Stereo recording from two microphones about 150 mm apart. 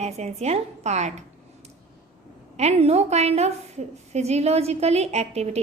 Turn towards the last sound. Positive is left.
turn(degrees=-45)  # may be behind; listen again after turning